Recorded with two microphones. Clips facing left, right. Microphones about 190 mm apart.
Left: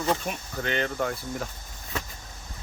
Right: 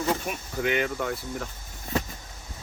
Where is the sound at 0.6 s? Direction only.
10° right (ahead or behind).